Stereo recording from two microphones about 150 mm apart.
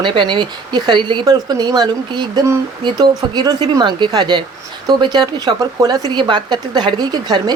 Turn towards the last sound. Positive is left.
turn(degrees=-25)  # may be behind; listen again after turning